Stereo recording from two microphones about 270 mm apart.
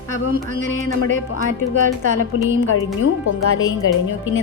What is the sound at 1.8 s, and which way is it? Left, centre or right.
Speech, right.